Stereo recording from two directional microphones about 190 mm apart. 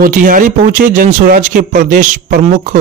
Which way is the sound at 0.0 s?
45° right (ahead or behind).